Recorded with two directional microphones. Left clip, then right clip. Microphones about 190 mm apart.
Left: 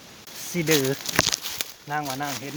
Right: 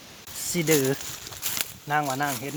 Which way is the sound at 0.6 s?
20° right (ahead or behind).